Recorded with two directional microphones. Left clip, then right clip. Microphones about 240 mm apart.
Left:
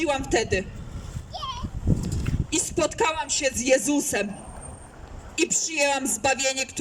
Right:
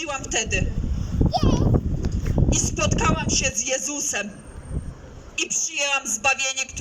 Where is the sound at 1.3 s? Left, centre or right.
Right.